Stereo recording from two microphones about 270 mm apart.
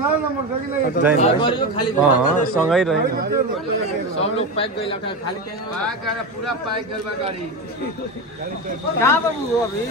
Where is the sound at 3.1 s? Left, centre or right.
Right.